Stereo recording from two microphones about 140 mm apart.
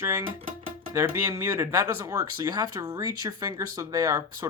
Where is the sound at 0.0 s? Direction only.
20° right (ahead or behind).